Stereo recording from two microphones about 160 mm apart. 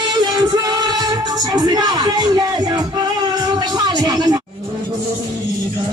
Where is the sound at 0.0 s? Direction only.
25° right (ahead or behind).